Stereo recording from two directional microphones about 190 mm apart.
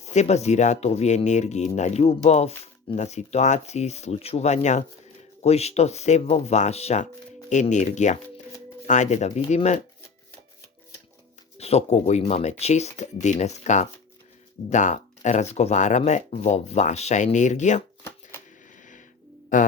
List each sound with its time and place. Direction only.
0.0 s speech: 35° left (ahead or behind)
11.5 s speech: 35° left (ahead or behind)
19.5 s speech: 45° left (ahead or behind)